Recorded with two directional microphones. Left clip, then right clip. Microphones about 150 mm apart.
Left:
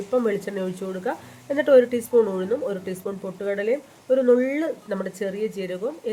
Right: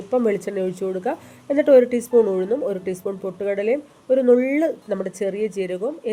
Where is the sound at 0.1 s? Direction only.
30° right (ahead or behind).